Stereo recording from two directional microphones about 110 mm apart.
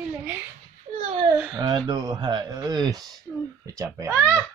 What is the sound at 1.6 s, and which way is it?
Speech, 40° right (ahead or behind).